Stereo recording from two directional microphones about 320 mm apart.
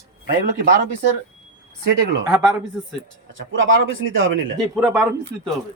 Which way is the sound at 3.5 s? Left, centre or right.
Right.